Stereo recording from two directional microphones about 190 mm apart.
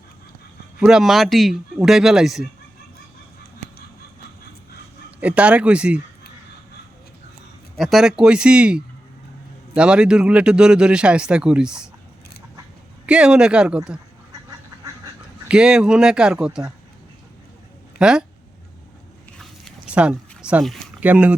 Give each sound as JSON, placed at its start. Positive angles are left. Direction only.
{"t": 0.8, "sound": "a man's voice", "side_deg": -5}
{"t": 5.2, "sound": "speech", "side_deg": -5}
{"t": 7.8, "sound": "a man's voice", "side_deg": 0}
{"t": 13.1, "sound": "a man's voice", "side_deg": -5}
{"t": 15.4, "sound": "a man's voice", "side_deg": -5}
{"t": 18.0, "sound": "a man's voice", "side_deg": -5}
{"t": 19.4, "sound": "a sound", "side_deg": 0}